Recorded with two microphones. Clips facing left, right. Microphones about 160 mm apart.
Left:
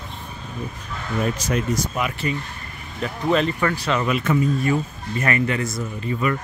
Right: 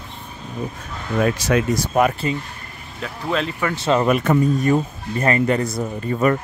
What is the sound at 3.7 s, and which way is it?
Speech, 25° right (ahead or behind).